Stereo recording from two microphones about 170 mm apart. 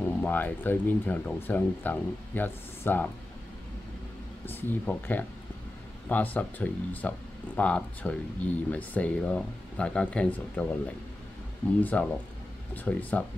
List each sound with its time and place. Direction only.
0.0 s speech: 10° left (ahead or behind)
4.5 s speech: 10° left (ahead or behind)
11.8 s speech: 5° left (ahead or behind)